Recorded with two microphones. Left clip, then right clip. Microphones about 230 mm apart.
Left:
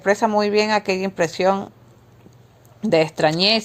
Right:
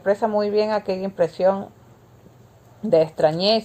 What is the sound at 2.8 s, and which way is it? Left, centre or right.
Speech, left.